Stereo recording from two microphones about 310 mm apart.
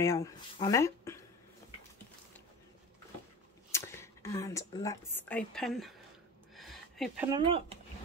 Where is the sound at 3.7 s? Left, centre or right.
Centre.